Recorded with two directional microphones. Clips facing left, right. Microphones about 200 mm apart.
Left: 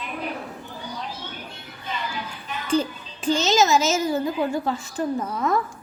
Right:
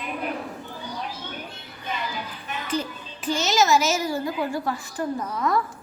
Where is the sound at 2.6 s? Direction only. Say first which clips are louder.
Left 6 dB; 30° left (ahead or behind).